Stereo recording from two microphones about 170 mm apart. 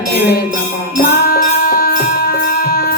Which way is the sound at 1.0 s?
60° left (ahead or behind).